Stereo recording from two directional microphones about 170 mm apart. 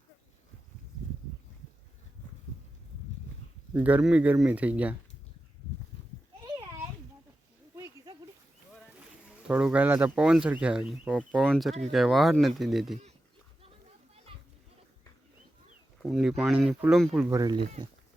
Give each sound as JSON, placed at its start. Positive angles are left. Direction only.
{"t": 3.8, "sound": "speech", "side_deg": -10}
{"t": 9.5, "sound": "speech", "side_deg": -5}
{"t": 14.3, "sound": "children playing", "side_deg": -30}
{"t": 16.0, "sound": "speech", "side_deg": 0}
{"t": 17.2, "sound": "speech", "side_deg": -20}